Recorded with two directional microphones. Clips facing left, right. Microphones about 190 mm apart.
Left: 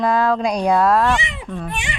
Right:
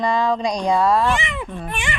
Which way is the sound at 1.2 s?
55° right (ahead or behind).